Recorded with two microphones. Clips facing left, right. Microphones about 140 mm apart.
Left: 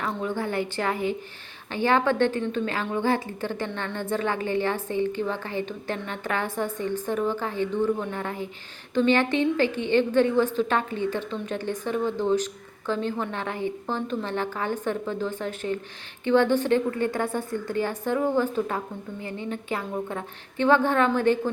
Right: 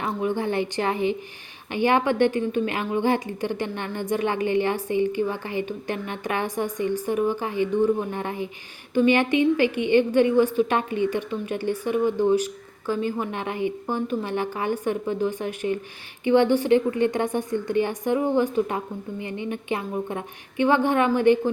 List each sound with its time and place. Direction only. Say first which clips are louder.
0.0 s a woman's voice: right 3 dB; 15° right (ahead or behind)